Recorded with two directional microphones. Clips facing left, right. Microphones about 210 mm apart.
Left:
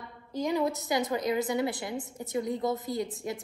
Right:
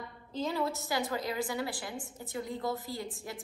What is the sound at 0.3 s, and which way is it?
A woman's voice, 15° left (ahead or behind).